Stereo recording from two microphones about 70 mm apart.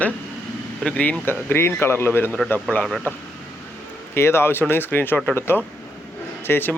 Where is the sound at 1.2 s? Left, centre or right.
Left.